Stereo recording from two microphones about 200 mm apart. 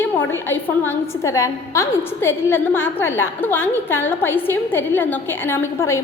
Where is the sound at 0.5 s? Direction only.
15° left (ahead or behind).